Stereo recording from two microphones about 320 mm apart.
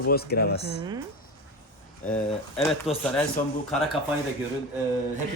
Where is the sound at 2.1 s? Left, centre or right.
Centre.